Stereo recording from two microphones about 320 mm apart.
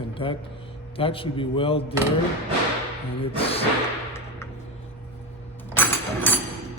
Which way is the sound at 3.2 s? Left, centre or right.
Centre.